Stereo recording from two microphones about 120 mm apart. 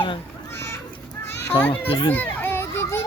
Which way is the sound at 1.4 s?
15° left (ahead or behind).